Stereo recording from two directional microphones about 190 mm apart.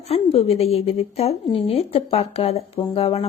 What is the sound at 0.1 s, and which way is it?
Speech, 35° left (ahead or behind).